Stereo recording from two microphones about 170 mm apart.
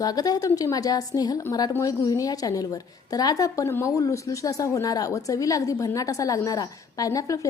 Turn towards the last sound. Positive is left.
turn(degrees=20)  # may be behind; listen again after turning